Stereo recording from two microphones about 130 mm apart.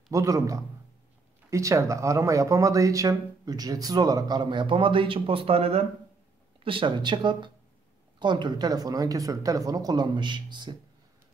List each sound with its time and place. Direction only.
0.1 s speech: 25° right (ahead or behind)